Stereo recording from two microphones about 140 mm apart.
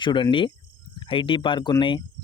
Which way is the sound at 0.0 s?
35° left (ahead or behind).